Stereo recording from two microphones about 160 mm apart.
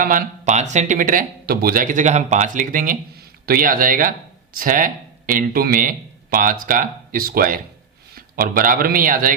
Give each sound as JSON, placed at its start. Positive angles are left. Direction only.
{"t": 0.0, "sound": "a man's voice", "side_deg": -55}